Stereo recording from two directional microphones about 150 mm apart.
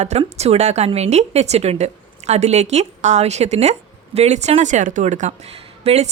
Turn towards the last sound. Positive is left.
turn(degrees=-45)  # may be behind; listen again after turning